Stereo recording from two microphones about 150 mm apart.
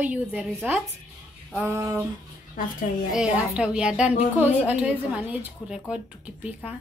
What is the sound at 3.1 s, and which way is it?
A woman's voice, 5° right (ahead or behind).